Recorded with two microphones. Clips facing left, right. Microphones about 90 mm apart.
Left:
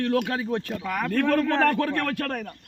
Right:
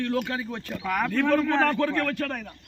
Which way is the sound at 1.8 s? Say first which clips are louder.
Even; 55° left (ahead or behind).